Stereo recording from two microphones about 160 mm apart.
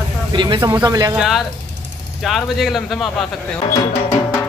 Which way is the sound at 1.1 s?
Centre (ahead or behind).